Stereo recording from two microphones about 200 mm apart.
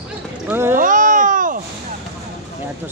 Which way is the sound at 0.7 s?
40° right (ahead or behind).